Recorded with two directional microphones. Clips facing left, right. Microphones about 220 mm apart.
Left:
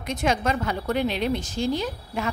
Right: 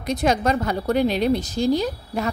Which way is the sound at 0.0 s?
35° right (ahead or behind).